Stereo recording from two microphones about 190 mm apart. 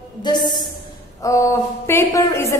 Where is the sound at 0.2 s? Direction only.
25° left (ahead or behind).